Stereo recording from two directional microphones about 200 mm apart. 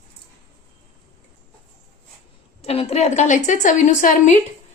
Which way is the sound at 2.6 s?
30° left (ahead or behind).